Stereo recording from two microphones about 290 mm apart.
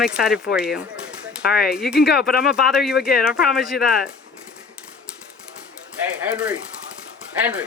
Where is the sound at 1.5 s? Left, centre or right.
Left.